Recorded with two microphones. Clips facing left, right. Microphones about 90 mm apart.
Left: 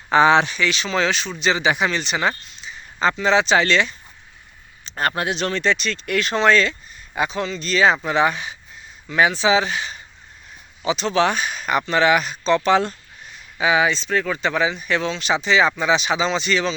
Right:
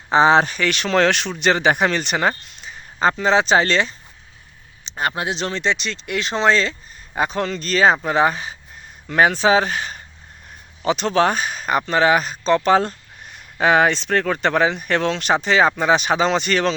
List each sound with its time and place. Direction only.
0.1 s speech: 30° right (ahead or behind)
4.9 s speech: 15° right (ahead or behind)
7.2 s speech: 50° right (ahead or behind)
9.0 s speech: 50° right (ahead or behind)
13.3 s speech: 55° right (ahead or behind)